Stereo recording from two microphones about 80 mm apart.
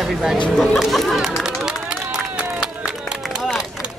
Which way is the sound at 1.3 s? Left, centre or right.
Centre.